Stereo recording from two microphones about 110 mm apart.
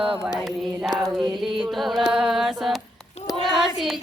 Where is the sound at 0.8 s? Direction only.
5° right (ahead or behind).